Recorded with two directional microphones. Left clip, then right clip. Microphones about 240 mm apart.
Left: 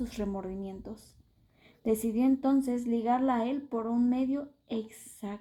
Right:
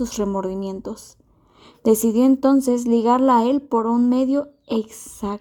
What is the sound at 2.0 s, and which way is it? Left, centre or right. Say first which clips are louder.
Speech: right 12 dB; right.